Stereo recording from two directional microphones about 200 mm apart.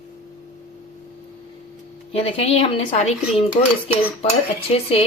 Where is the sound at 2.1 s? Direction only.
30° left (ahead or behind).